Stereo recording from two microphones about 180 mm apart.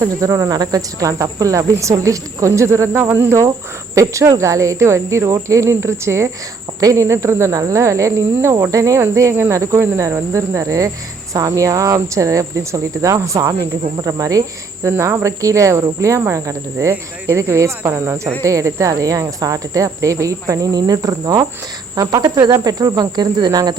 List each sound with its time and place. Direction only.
0.0 s speech: 15° right (ahead or behind)